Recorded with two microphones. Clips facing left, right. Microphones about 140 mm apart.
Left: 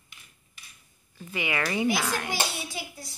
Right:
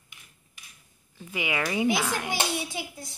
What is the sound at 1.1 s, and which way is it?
Speech, 15° right (ahead or behind).